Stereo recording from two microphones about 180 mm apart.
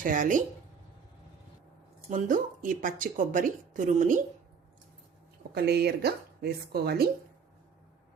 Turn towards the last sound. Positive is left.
turn(degrees=-60)  # may be behind; listen again after turning